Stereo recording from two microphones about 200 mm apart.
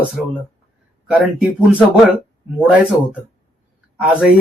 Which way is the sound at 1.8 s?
5° right (ahead or behind).